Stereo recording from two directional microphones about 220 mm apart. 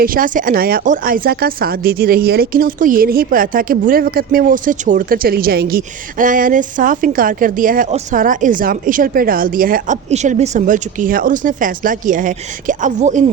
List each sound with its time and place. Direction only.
0.0 s speech: 40° right (ahead or behind)